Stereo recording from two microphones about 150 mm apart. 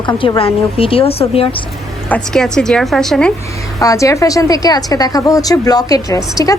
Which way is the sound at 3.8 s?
20° left (ahead or behind).